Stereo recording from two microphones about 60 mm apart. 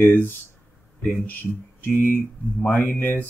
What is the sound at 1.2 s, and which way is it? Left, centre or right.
Speech, left.